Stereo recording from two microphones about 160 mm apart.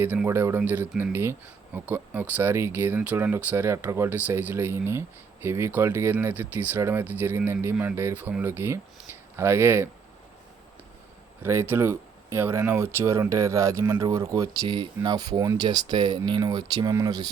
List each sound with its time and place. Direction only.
0.0 s speech: 10° right (ahead or behind)
11.4 s speech: 15° right (ahead or behind)